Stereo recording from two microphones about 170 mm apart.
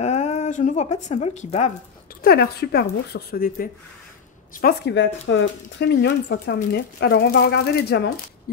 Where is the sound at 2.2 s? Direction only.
65° left (ahead or behind).